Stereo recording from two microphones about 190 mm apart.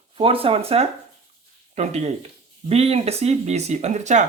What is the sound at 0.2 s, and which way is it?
Speech, 30° right (ahead or behind).